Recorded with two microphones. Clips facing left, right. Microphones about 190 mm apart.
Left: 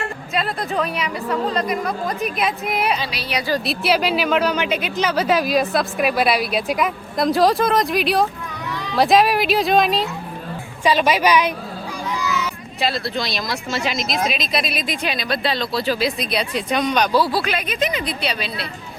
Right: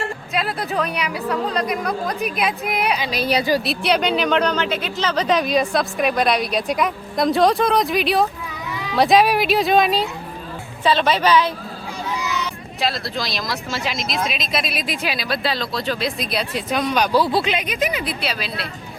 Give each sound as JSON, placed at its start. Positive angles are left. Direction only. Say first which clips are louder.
{"t": 0.3, "sound": "speech", "louder": "left 1 dB", "side_deg": 0}
{"t": 3.1, "sound": "a woman's voice", "louder": "right 8 dB", "side_deg": -45}
{"t": 3.6, "sound": "speech", "louder": "even", "side_deg": 0}
{"t": 10.8, "sound": "a woman's voice", "louder": "left 1 dB", "side_deg": 10}
{"t": 12.8, "sound": "speech", "louder": "left 1 dB", "side_deg": 0}